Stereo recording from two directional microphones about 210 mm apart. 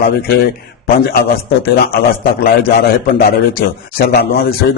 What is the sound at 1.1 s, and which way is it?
Speech, 45° left (ahead or behind).